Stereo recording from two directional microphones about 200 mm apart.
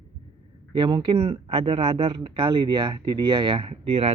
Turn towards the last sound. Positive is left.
turn(degrees=-30)  # may be behind; listen again after turning